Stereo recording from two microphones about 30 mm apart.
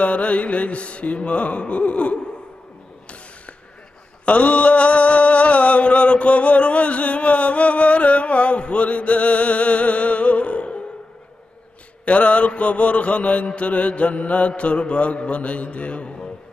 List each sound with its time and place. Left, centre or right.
0.0 s music: left
4.3 s mantra: left
12.0 s music: left